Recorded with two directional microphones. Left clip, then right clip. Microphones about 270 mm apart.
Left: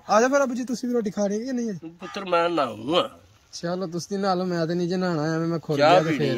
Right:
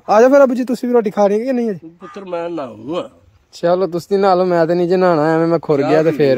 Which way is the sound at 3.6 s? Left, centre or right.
Right.